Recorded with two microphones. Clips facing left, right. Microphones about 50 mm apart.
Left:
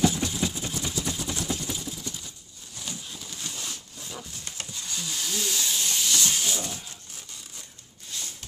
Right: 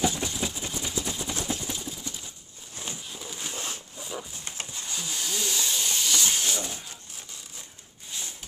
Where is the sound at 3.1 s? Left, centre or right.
Centre.